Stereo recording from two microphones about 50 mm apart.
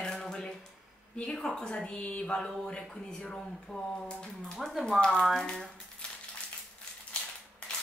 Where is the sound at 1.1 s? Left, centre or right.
Centre.